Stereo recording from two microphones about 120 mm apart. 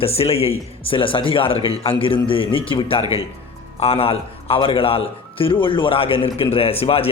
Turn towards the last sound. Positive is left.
turn(degrees=55)  # may be behind; listen again after turning